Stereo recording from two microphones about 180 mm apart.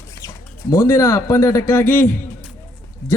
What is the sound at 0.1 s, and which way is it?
Speech, 20° left (ahead or behind).